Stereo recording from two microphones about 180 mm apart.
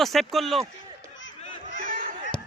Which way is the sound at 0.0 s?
Centre (ahead or behind).